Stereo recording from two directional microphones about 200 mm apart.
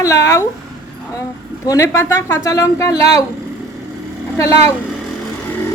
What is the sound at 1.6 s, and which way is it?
Speech, 15° left (ahead or behind).